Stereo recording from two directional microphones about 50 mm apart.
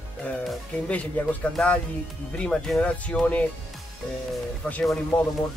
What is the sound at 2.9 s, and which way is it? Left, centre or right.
Speech, left.